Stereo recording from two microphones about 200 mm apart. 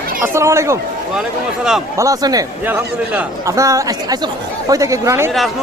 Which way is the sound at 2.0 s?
15° right (ahead or behind).